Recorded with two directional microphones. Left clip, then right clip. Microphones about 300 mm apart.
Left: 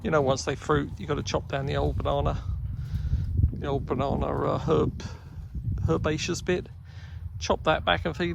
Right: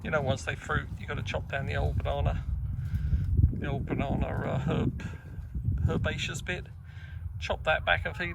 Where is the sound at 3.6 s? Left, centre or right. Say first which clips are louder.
Left 7 dB; centre.